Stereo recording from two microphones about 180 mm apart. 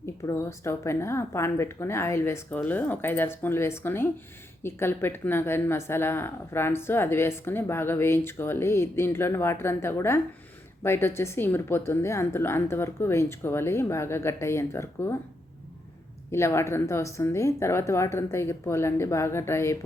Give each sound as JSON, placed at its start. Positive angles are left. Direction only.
{"t": 0.0, "sound": "speech", "side_deg": 15}
{"t": 16.3, "sound": "speech", "side_deg": 15}